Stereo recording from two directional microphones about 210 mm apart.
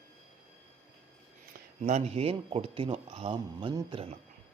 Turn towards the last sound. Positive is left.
turn(degrees=-25)  # may be behind; listen again after turning